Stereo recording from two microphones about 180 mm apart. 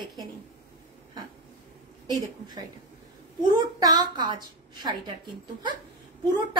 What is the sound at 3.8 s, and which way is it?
A woman's voice, 25° right (ahead or behind).